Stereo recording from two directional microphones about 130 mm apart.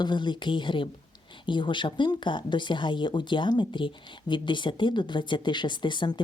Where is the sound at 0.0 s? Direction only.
35° left (ahead or behind).